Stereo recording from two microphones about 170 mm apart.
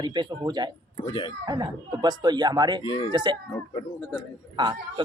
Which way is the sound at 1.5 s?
25° right (ahead or behind).